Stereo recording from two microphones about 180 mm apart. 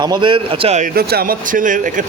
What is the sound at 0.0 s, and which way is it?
Speech, 25° right (ahead or behind).